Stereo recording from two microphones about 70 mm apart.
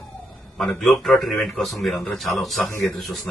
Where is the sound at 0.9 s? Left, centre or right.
Centre.